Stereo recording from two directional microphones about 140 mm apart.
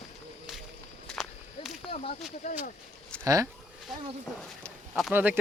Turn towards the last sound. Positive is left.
turn(degrees=-10)  # may be behind; listen again after turning